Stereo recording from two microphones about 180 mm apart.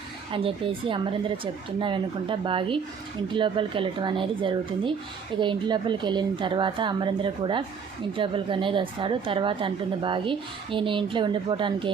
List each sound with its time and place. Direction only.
0.3 s a woman's voice: 30° right (ahead or behind)